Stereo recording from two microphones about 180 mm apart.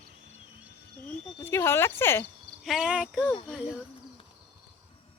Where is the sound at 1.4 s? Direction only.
15° left (ahead or behind).